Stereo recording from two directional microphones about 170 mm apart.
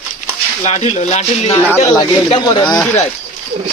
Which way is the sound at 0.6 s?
40° left (ahead or behind).